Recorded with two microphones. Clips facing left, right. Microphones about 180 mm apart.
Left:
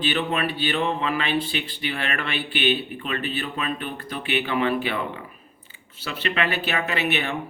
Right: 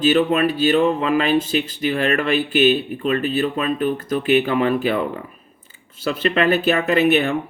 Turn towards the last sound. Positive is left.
turn(degrees=-45)  # may be behind; listen again after turning